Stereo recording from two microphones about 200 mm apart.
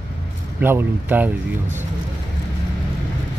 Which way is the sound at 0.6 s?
10° right (ahead or behind).